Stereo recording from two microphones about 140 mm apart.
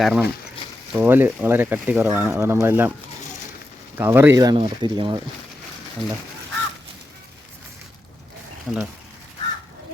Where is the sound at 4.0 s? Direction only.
15° right (ahead or behind).